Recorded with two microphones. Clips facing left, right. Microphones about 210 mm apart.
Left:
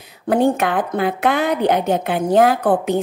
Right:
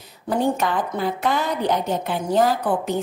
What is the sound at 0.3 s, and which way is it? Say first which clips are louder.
A woman's voice: left 5 dB; 60° left (ahead or behind).